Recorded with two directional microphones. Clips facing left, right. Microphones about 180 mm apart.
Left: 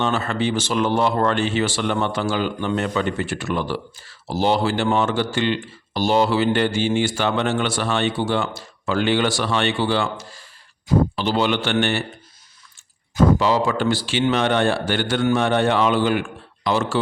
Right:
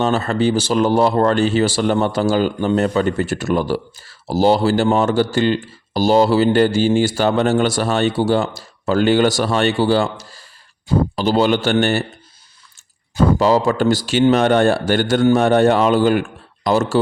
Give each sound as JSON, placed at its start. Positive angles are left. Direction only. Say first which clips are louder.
{"t": 0.0, "sound": "speech", "louder": "right 5 dB", "side_deg": -40}
{"t": 13.1, "sound": "speech", "louder": "right 3 dB", "side_deg": -40}